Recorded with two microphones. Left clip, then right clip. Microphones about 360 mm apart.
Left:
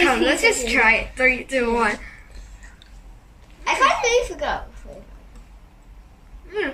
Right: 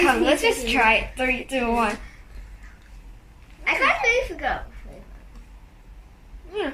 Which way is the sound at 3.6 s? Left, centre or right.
Centre.